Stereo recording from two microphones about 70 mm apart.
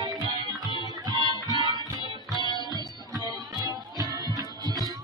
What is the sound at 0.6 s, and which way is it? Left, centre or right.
Music, left.